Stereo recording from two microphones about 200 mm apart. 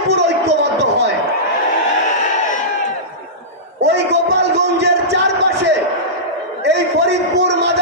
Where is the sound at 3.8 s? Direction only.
60° right (ahead or behind).